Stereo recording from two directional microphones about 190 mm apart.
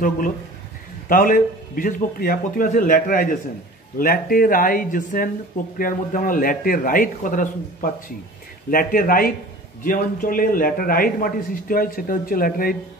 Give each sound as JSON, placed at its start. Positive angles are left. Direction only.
{"t": 1.0, "sound": "a man's voice", "side_deg": 50}